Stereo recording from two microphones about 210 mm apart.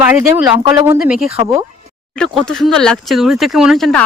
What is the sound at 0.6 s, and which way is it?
Speech, 20° right (ahead or behind).